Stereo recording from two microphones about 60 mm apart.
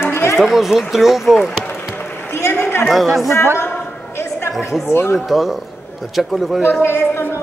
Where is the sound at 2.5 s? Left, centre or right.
Left.